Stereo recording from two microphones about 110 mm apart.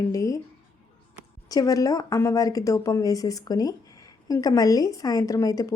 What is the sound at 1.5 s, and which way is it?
Speech, 35° left (ahead or behind).